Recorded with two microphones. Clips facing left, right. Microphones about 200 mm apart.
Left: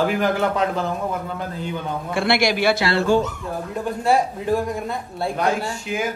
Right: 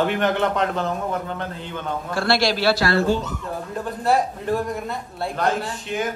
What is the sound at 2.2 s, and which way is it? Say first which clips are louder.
Speech: left 1 dB; 20° left (ahead or behind).